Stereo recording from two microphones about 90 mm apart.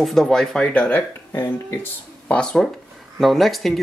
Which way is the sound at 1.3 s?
30° left (ahead or behind).